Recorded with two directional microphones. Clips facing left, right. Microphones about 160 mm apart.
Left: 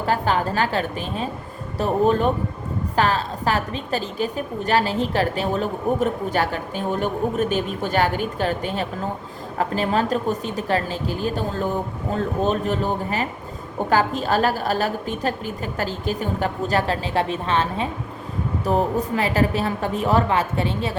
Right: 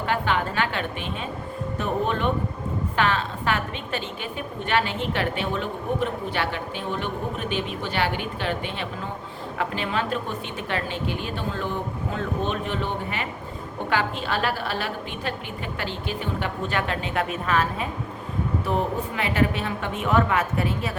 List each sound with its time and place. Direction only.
0.0 s a woman's voice: 40° left (ahead or behind)
18.6 s a woman's voice: 40° left (ahead or behind)